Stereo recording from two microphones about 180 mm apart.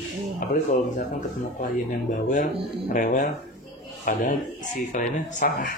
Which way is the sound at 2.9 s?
45° left (ahead or behind).